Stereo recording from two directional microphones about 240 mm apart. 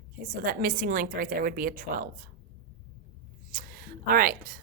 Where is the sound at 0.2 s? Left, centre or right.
Right.